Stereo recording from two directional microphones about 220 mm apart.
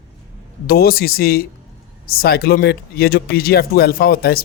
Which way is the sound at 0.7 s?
45° left (ahead or behind).